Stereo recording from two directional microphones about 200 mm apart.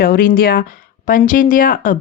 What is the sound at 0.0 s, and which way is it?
Speech, 45° left (ahead or behind).